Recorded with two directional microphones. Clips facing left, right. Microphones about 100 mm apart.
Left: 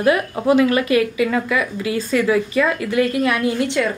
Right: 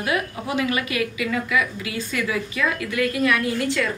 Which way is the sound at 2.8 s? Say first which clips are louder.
Left 4 dB; 25° left (ahead or behind).